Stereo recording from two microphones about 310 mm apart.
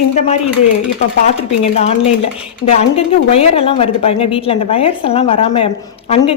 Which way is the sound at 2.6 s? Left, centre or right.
Centre.